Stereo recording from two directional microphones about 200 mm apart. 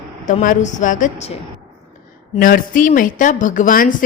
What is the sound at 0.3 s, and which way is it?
A woman's voice, 40° left (ahead or behind).